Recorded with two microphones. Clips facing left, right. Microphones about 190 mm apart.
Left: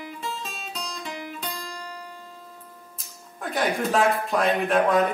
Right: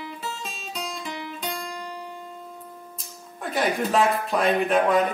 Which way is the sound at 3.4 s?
Centre (ahead or behind).